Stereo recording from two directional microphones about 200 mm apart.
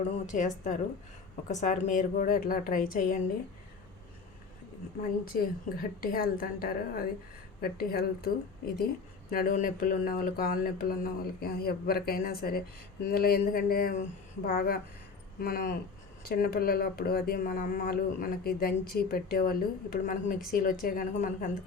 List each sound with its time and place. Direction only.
0.0 s a woman's voice: 40° left (ahead or behind)
5.2 s speech: 45° left (ahead or behind)